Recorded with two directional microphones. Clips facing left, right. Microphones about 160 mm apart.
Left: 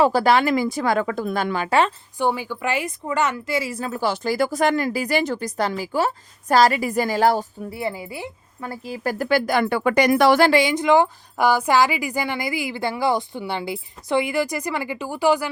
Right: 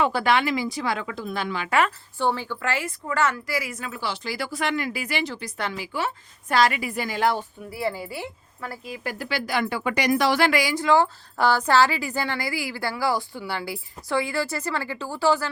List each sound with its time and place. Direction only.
0.0 s speech: 40° left (ahead or behind)
2.1 s a woman's voice: 15° left (ahead or behind); by 7.4 s 40° left (ahead or behind)
7.7 s speech: 20° left (ahead or behind)
9.0 s speech: 45° left (ahead or behind)
10.5 s speech: 25° left (ahead or behind)